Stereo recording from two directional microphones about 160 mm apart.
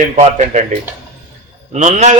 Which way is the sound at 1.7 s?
45° right (ahead or behind).